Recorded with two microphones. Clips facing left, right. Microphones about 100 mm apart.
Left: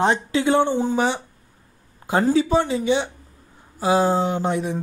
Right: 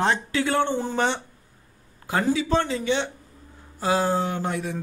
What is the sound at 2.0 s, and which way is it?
Speech, 25° left (ahead or behind).